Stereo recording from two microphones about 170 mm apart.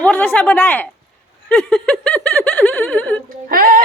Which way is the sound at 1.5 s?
5° left (ahead or behind).